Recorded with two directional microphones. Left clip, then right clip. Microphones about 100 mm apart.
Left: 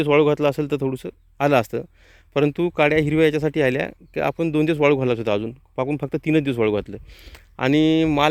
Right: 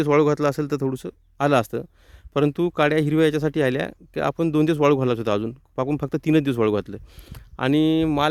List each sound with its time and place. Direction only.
0.0 s speech: 40° right (ahead or behind)
1.4 s speech: 25° right (ahead or behind)
2.3 s speech: 35° right (ahead or behind)
4.4 s speech: 50° right (ahead or behind); by 7.4 s 35° right (ahead or behind)
7.5 s speech: 15° right (ahead or behind)